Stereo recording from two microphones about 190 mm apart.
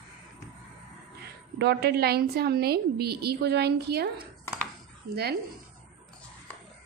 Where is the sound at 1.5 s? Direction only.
60° right (ahead or behind).